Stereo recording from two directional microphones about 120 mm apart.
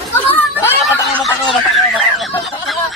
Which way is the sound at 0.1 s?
20° left (ahead or behind).